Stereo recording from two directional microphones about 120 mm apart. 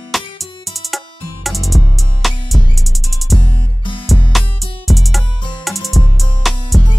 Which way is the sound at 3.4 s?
45° left (ahead or behind).